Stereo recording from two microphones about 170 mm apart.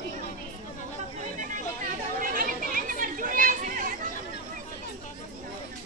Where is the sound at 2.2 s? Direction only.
55° right (ahead or behind).